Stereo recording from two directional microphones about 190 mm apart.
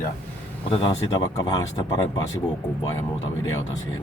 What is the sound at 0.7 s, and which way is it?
Speech, 30° left (ahead or behind).